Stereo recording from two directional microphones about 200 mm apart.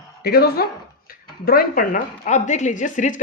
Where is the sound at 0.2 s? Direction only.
50° left (ahead or behind).